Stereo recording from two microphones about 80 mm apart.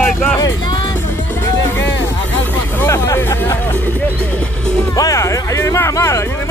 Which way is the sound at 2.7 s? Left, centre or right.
Left.